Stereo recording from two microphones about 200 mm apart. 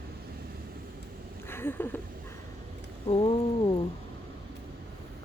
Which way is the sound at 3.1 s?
30° left (ahead or behind).